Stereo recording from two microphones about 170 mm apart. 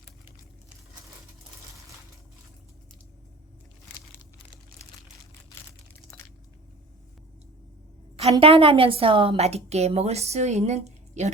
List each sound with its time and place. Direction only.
8.1 s a woman's voice: 35° right (ahead or behind)